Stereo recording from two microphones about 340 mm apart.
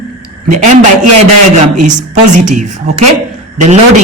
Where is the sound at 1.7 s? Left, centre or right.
Right.